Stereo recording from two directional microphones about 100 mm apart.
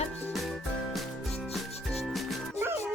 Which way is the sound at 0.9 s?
Centre (ahead or behind).